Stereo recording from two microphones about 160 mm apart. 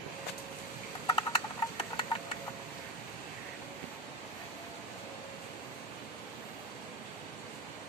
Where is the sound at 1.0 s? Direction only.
30° left (ahead or behind).